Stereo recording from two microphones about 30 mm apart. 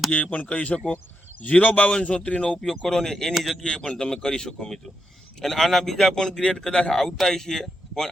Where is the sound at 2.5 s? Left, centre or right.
Centre.